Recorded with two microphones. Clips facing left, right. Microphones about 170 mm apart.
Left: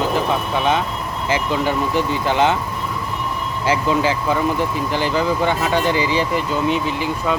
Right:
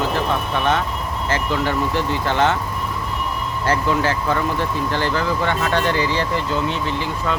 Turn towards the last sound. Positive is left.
turn(degrees=15)  # may be behind; listen again after turning